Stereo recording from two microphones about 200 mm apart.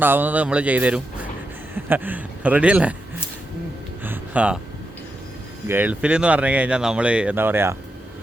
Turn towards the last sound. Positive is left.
turn(degrees=-10)  # may be behind; listen again after turning